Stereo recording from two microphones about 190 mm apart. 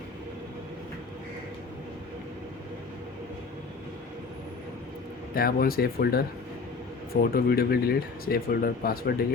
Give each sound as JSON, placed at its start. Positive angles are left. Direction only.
{"t": 5.3, "sound": "speech", "side_deg": 50}